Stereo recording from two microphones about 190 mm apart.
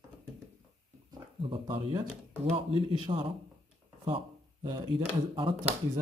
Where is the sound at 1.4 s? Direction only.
30° right (ahead or behind).